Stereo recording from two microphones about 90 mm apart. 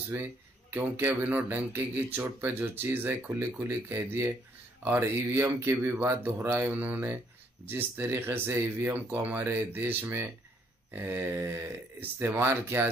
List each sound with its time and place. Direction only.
0.1 s speech: 20° right (ahead or behind)